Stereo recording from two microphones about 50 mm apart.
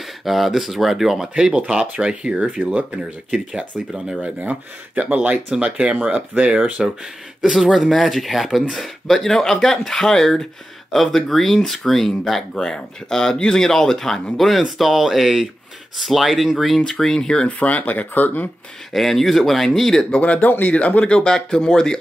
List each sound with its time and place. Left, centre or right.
0.0 s speech: centre
1.3 s speech: right
5.3 s speech: centre
7.4 s speech: centre
17.5 s speech: left
18.9 s speech: centre
20.1 s speech: left